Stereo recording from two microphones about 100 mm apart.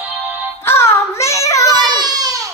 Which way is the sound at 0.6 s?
25° left (ahead or behind).